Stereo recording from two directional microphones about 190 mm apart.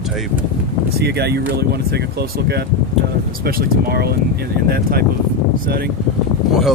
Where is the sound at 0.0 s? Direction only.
Centre (ahead or behind).